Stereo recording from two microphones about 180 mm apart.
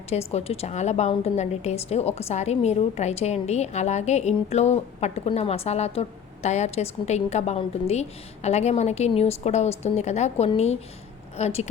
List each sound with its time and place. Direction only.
0.1 s a woman's voice: 35° left (ahead or behind)